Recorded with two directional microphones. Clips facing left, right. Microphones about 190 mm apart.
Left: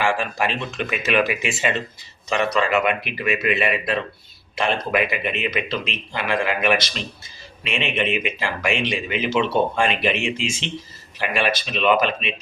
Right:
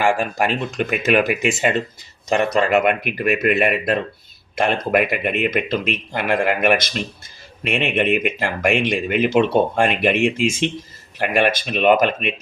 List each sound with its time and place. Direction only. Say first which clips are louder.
0.0 s speech: right 3 dB; 50° right (ahead or behind)